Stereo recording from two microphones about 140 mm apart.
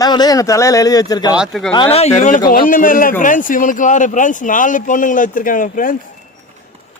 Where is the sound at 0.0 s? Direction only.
30° left (ahead or behind).